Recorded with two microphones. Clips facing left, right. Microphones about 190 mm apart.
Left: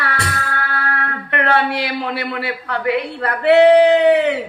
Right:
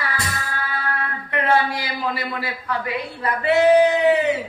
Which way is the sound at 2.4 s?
65° left (ahead or behind).